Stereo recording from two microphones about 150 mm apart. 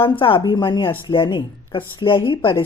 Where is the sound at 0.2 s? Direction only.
35° left (ahead or behind).